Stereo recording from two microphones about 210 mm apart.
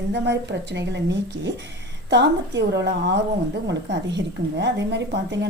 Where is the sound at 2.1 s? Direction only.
55° right (ahead or behind).